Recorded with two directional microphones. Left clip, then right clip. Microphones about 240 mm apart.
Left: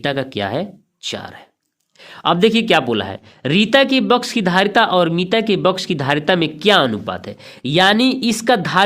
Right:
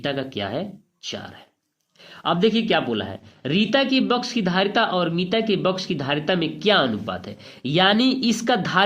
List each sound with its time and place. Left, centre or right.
0.0 s speech: left